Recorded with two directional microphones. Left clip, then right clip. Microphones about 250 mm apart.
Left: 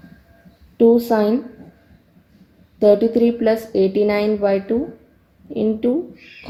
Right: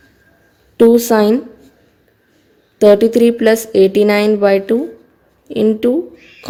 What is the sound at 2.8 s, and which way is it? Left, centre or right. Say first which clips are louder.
A woman's voice: right 5 dB; right.